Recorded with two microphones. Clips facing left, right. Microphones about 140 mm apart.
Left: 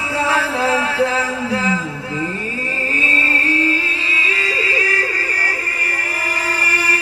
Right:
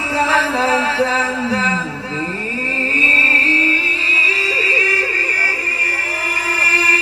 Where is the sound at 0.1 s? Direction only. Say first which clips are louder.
Right 2 dB; 25° right (ahead or behind).